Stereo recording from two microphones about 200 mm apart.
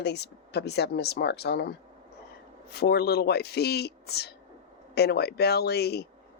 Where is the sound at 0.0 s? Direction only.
55° left (ahead or behind).